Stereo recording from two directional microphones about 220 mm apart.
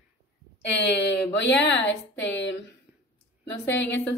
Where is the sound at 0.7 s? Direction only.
50° left (ahead or behind).